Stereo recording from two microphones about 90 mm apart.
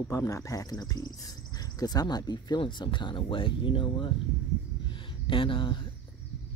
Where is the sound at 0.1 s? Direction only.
35° left (ahead or behind); by 4.1 s 70° left (ahead or behind).